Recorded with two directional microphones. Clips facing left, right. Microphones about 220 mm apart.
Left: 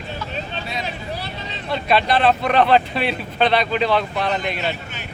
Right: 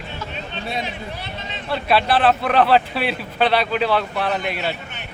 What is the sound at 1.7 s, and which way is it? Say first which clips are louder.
Speech: even; 5° right (ahead or behind).